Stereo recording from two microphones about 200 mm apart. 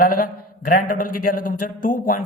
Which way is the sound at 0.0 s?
45° left (ahead or behind).